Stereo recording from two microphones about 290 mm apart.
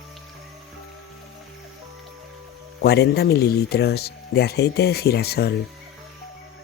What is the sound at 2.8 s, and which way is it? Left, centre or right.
Speech, left.